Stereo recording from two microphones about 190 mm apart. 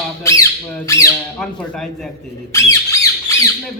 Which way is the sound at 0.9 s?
15° left (ahead or behind).